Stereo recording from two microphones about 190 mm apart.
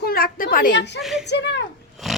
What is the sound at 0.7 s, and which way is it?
Speech, 65° left (ahead or behind).